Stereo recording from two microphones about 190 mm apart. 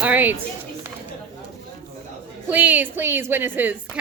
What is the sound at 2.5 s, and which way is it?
A woman's voice, 10° right (ahead or behind).